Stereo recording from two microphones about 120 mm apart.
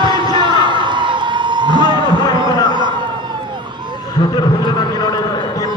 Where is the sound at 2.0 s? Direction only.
35° left (ahead or behind).